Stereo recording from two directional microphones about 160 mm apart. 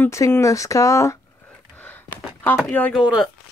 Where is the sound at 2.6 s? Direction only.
10° left (ahead or behind).